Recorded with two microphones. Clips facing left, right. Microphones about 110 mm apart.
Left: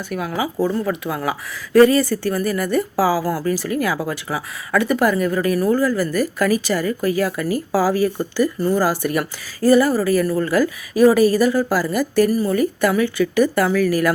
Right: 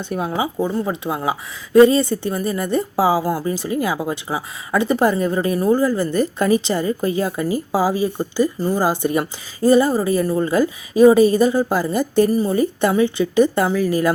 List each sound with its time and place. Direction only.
0.0 s speech: 30° right (ahead or behind)